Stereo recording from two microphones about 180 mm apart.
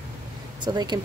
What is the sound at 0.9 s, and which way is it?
Speech, 25° right (ahead or behind).